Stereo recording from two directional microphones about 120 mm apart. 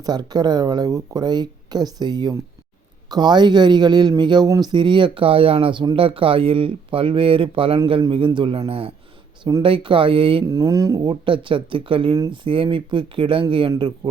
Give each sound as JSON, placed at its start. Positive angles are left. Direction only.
{"t": 0.0, "sound": "speech", "side_deg": -35}
{"t": 9.4, "sound": "speech", "side_deg": -30}
{"t": 9.6, "sound": "speech", "side_deg": -45}
{"t": 10.4, "sound": "speech", "side_deg": -30}